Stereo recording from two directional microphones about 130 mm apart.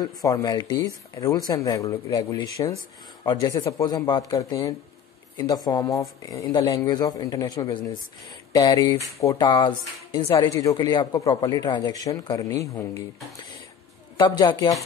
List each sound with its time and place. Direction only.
0.0 s speech: 30° left (ahead or behind)
9.5 s a woman's voice: 35° left (ahead or behind)
10.3 s speech: 25° left (ahead or behind)
14.1 s a woman's voice: 30° left (ahead or behind)